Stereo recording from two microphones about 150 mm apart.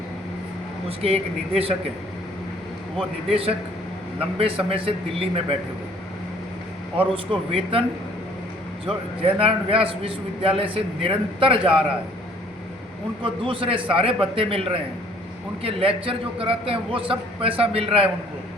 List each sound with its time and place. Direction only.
0.9 s a man's voice: 40° right (ahead or behind)
3.2 s a man's voice: 40° right (ahead or behind)
7.1 s a man's voice: 40° right (ahead or behind)
8.9 s a man's voice: 40° right (ahead or behind)
13.2 s a man's voice: 35° right (ahead or behind)